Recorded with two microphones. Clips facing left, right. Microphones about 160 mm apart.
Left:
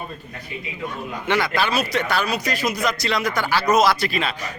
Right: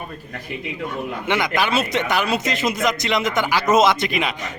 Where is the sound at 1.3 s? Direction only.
15° right (ahead or behind).